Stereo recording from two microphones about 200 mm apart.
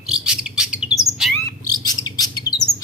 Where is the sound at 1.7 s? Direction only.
20° left (ahead or behind).